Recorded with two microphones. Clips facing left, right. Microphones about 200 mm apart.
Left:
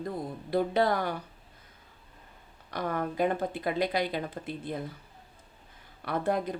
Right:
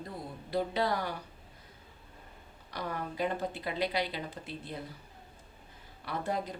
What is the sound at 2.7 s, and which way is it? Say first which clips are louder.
A woman's voice: left 6 dB; 55° left (ahead or behind).